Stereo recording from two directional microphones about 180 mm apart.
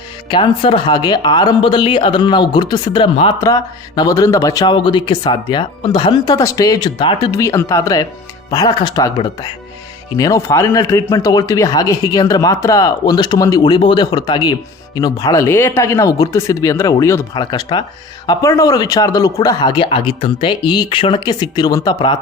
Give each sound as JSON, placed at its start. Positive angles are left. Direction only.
{"t": 0.3, "sound": "speech", "side_deg": 30}